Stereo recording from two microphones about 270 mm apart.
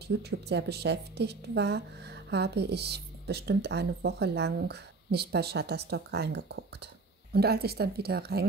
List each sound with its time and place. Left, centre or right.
0.2 s a woman's voice: right